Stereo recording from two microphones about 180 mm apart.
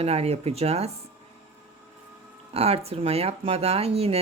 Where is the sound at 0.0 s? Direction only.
35° right (ahead or behind).